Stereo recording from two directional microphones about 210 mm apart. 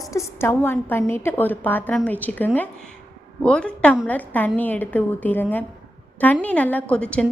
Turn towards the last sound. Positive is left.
turn(degrees=5)  # may be behind; listen again after turning